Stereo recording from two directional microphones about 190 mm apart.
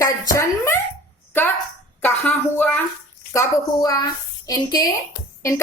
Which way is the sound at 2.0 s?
10° left (ahead or behind).